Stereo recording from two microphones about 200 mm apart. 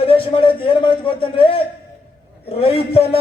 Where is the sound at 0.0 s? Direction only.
25° left (ahead or behind).